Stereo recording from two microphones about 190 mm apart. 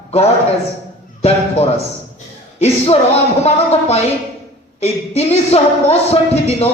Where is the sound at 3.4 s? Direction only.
35° left (ahead or behind).